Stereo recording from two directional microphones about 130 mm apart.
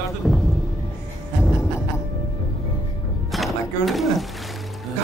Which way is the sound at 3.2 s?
Centre (ahead or behind).